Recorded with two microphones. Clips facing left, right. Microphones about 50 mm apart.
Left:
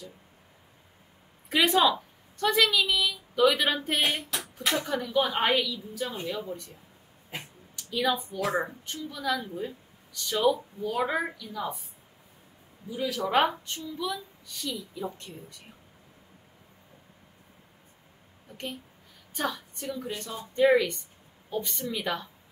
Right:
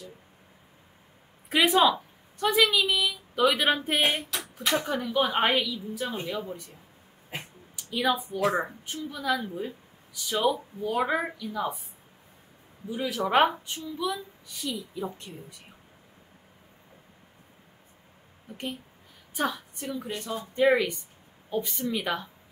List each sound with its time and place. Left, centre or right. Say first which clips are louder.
1.5 s a woman's voice: right 1 dB; centre
8.4 s speech: right 2 dB; right
8.6 s a woman's voice: right 1 dB; centre
12.9 s a woman's voice: right 1 dB; right
19.3 s a woman's voice: right 2 dB; centre